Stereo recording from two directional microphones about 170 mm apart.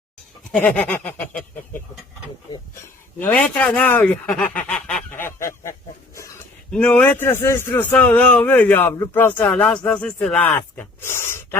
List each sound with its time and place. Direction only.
0.5 s a man's voice: 10° left (ahead or behind)
3.2 s a man's voice: 10° left (ahead or behind)
5.1 s a man's voice: 15° left (ahead or behind)
6.7 s a man's voice: 5° left (ahead or behind)